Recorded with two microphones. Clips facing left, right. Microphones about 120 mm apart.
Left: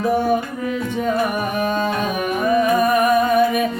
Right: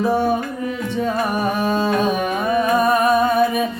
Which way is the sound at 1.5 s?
30° right (ahead or behind).